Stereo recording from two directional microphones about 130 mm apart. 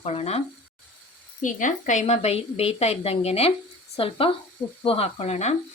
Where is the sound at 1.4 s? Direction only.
80° left.